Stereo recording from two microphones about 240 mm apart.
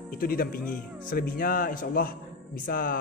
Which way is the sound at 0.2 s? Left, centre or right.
Left.